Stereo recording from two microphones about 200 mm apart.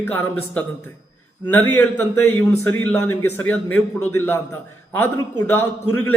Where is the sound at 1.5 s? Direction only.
10° left (ahead or behind).